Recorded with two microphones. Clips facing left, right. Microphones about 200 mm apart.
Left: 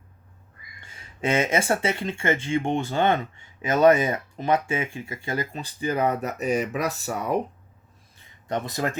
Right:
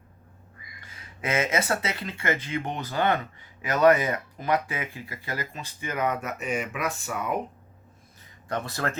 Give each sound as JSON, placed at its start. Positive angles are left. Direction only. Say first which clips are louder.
{"t": 0.8, "sound": "speech", "louder": "left 7 dB", "side_deg": 30}
{"t": 8.4, "sound": "speech", "louder": "left 3 dB", "side_deg": 20}